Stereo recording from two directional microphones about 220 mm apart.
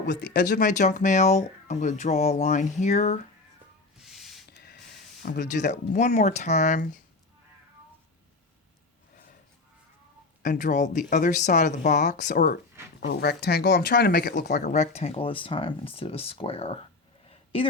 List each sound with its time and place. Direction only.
0.1 s speech: 50° left (ahead or behind)
0.6 s speech: 35° left (ahead or behind)
4.0 s a sound: centre (ahead or behind)
5.2 s speech: 40° left (ahead or behind)
10.4 s speech: 35° left (ahead or behind)
13.1 s speech: 50° left (ahead or behind)
14.7 s speech: 30° left (ahead or behind)
17.2 s a sound: 25° left (ahead or behind)